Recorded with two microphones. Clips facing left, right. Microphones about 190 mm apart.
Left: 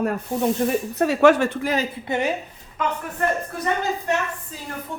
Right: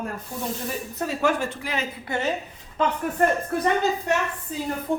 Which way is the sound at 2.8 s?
30° right (ahead or behind).